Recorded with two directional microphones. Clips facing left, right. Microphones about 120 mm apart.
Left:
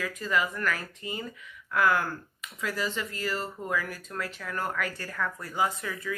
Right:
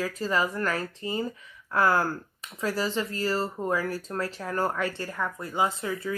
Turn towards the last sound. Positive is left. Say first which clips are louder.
# right 3 dB
turn(degrees=-30)  # may be behind; listen again after turning